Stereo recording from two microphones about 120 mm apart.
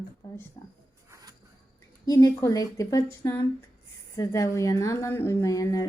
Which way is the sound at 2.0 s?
30° left (ahead or behind).